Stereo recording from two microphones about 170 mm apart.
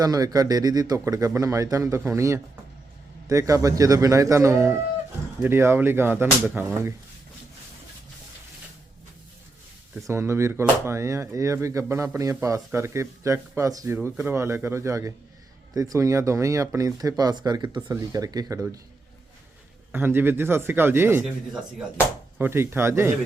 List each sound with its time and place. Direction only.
0.0 s speech: 20° right (ahead or behind)
10.1 s speech: 15° right (ahead or behind)
19.9 s speech: 10° right (ahead or behind)